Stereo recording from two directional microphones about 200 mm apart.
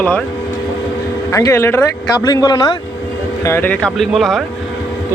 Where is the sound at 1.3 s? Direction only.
15° left (ahead or behind).